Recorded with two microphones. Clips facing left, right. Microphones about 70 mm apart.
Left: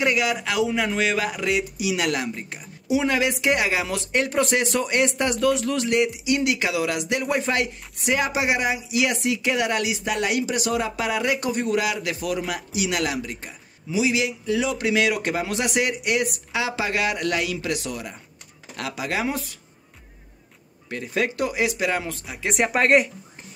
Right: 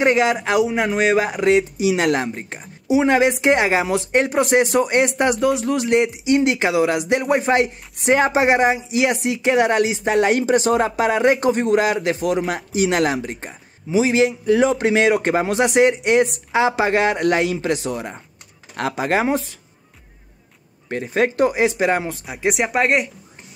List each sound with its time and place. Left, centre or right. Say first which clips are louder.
0.0 s speech: right 6 dB; right
20.9 s speech: right 6 dB; right
22.5 s speech: even; centre